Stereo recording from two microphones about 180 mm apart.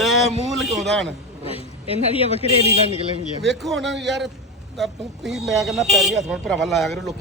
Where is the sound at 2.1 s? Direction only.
30° left (ahead or behind).